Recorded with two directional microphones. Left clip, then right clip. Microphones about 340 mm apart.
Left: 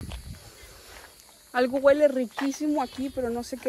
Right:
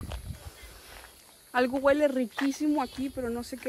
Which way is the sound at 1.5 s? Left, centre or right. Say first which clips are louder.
Left 4 dB; centre.